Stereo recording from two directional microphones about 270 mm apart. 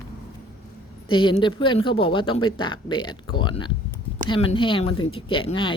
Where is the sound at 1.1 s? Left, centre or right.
Centre.